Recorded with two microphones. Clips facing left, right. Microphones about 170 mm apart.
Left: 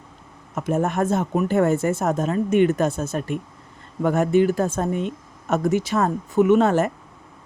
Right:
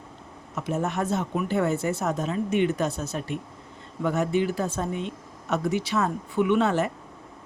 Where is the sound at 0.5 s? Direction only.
50° left (ahead or behind).